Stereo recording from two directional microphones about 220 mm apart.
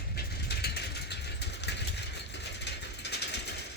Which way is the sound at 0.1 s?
45° left (ahead or behind).